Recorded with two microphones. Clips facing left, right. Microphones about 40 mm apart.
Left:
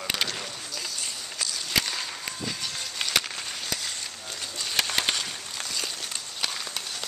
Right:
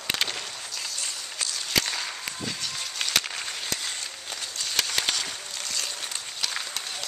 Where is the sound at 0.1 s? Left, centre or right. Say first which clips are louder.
Right 1 dB; centre.